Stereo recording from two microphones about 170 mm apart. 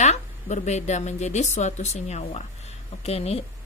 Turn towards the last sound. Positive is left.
turn(degrees=35)  # may be behind; listen again after turning